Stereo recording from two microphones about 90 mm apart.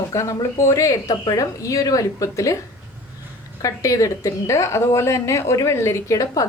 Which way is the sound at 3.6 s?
40° left (ahead or behind).